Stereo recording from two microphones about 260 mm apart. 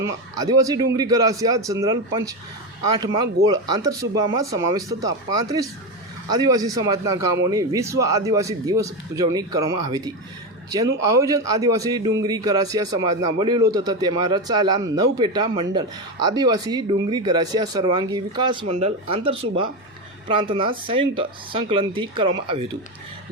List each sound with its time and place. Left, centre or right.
0.0 s a man's voice: centre
3.8 s a man's voice: centre